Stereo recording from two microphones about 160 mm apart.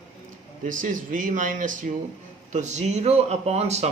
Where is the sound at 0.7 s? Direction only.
55° right (ahead or behind).